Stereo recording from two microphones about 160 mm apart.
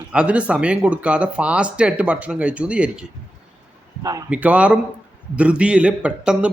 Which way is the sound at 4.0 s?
20° right (ahead or behind).